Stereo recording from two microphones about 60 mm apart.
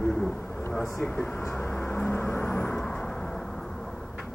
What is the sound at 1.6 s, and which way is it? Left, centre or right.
Vehicle, left.